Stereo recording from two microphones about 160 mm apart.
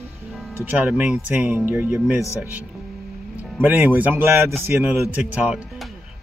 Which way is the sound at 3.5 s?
10° right (ahead or behind).